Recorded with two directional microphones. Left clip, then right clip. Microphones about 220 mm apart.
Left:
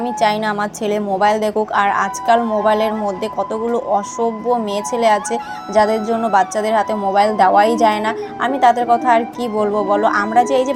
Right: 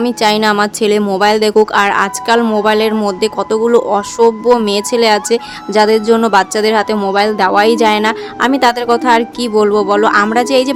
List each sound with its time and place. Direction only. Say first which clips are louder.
0.2 s a woman's voice: right 5 dB; 20° right (ahead or behind)